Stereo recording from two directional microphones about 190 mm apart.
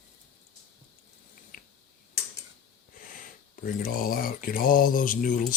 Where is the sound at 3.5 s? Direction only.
45° left (ahead or behind).